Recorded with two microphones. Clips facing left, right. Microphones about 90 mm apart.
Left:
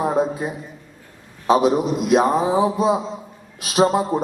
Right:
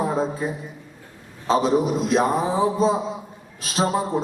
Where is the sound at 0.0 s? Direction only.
15° left (ahead or behind).